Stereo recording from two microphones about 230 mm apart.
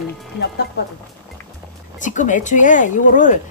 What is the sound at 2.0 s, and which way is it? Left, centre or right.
Speech, left.